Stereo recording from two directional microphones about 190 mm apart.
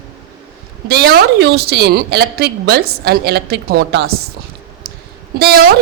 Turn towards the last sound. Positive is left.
turn(degrees=-55)  # may be behind; listen again after turning